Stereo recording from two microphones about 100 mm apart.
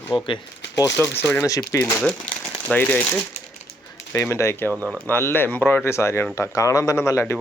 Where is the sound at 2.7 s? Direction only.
15° left (ahead or behind).